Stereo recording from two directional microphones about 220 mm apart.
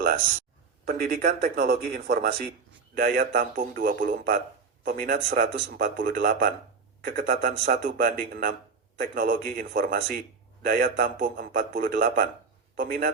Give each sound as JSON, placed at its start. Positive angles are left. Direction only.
{"t": 0.9, "sound": "a man's voice", "side_deg": -45}